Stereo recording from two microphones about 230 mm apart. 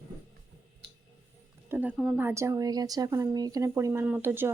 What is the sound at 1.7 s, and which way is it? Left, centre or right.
A woman's voice, centre.